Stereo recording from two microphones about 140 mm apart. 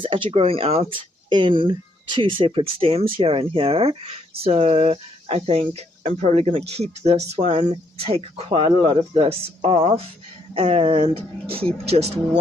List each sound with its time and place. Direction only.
0.0 s speech: 40° right (ahead or behind); by 7.7 s 55° right (ahead or behind)
7.9 s speech: 45° right (ahead or behind)